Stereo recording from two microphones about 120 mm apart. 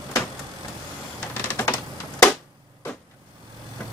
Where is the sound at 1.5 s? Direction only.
20° left (ahead or behind).